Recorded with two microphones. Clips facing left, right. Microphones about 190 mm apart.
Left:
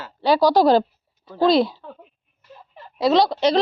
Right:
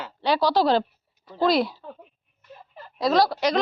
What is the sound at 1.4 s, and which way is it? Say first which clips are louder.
Speech: left 4 dB; 25° left (ahead or behind).